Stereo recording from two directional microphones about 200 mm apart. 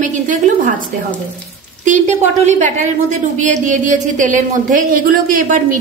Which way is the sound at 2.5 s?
35° right (ahead or behind).